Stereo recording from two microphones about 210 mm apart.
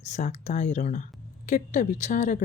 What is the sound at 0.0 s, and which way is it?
Speech, 35° left (ahead or behind).